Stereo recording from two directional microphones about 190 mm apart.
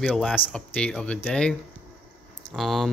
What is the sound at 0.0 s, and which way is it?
Speech, 5° left (ahead or behind).